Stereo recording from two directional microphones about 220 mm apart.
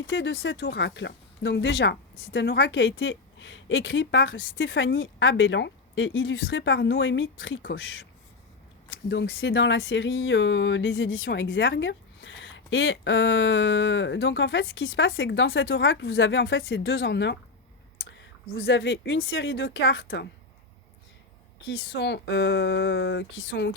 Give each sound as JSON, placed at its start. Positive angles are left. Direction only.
{"t": 0.1, "sound": "speech", "side_deg": 60}
{"t": 9.0, "sound": "a woman's voice", "side_deg": 50}
{"t": 21.7, "sound": "speech", "side_deg": 45}